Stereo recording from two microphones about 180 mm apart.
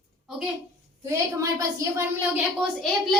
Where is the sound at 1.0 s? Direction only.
15° right (ahead or behind).